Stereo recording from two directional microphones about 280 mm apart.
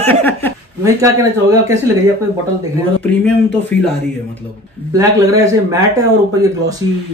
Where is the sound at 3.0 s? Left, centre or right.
Centre.